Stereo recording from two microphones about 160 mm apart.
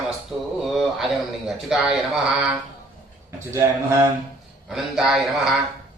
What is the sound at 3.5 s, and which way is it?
Speech, 15° right (ahead or behind).